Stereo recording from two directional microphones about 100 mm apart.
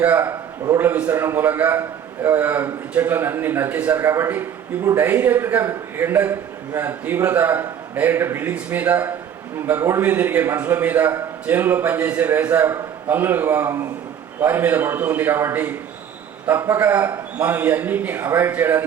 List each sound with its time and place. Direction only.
0.0 s a man's voice: 20° right (ahead or behind)
1.1 s a man's voice: 20° right (ahead or behind)